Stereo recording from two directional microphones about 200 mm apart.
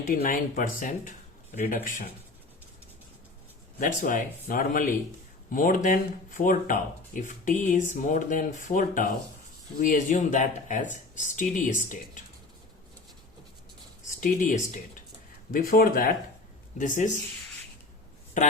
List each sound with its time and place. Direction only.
0.1 s speech: 40° left (ahead or behind)
3.8 s speech: 45° left (ahead or behind)
14.2 s speech: 40° left (ahead or behind)